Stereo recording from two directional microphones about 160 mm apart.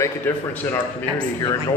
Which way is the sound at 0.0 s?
15° left (ahead or behind).